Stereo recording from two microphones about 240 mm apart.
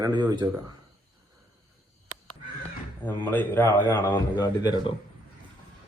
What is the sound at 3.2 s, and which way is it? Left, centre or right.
Speech, centre.